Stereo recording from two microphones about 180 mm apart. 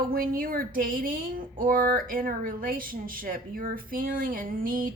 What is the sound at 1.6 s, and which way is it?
Speech, 50° right (ahead or behind).